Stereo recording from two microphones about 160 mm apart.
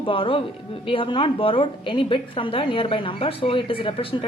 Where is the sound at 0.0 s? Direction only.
35° left (ahead or behind).